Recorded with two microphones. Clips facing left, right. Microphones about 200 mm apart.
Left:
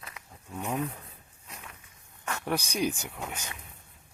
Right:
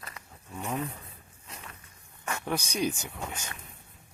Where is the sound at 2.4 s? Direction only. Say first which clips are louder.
Left 1 dB; 10° left (ahead or behind).